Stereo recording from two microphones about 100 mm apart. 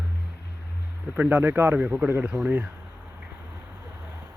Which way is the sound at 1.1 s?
15° right (ahead or behind).